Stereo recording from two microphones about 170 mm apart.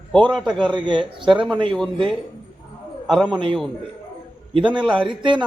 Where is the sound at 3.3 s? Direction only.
30° right (ahead or behind).